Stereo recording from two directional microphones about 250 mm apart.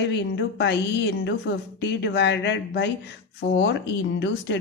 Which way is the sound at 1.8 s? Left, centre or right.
Left.